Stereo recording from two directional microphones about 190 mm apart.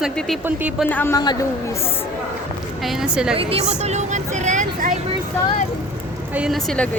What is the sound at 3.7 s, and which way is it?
Vehicle, 35° right (ahead or behind).